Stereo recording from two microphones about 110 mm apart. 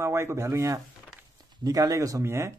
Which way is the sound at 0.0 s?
25° right (ahead or behind).